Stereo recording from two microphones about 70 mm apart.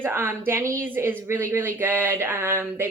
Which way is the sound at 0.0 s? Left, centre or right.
Right.